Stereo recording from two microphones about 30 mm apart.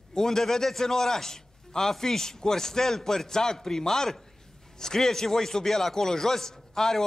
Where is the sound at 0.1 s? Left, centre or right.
Centre.